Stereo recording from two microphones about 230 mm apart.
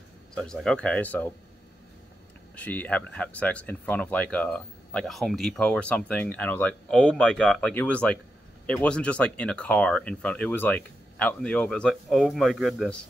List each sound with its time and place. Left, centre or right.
0.3 s speech: centre
2.5 s speech: centre